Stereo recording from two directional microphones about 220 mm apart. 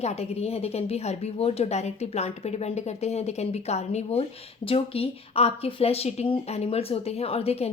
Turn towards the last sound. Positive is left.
turn(degrees=25)  # may be behind; listen again after turning